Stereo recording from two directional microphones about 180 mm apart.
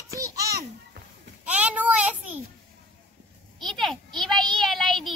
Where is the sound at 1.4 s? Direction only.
5° right (ahead or behind).